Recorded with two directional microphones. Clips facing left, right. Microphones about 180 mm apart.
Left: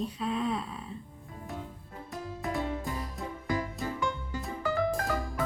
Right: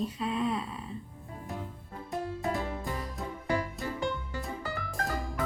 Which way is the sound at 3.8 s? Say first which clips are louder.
Left 1 dB; centre (ahead or behind).